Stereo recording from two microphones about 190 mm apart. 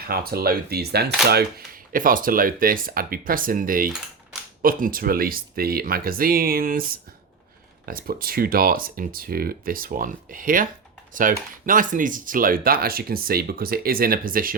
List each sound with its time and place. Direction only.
0.0 s speech: 50° right (ahead or behind)